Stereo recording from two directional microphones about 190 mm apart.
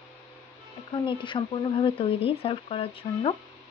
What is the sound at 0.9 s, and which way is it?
Speech, 25° left (ahead or behind).